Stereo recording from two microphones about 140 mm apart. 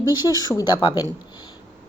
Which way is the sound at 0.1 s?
30° left (ahead or behind).